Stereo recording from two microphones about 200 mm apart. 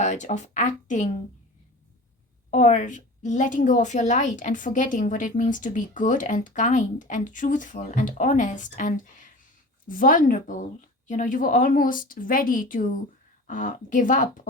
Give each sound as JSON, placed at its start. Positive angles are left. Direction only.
{"t": 0.0, "sound": "a woman's voice", "side_deg": 35}
{"t": 2.5, "sound": "a woman's voice", "side_deg": 40}